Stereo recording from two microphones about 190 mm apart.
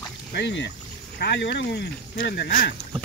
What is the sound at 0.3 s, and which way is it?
Speech, 70° left (ahead or behind).